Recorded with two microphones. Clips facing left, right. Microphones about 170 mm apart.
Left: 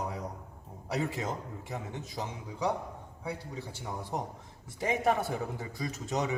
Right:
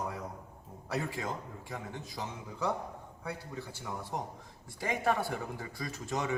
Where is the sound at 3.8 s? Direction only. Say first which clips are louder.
Left 3 dB; 20° left (ahead or behind).